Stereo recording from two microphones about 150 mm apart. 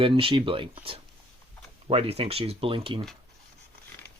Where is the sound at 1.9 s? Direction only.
40° right (ahead or behind).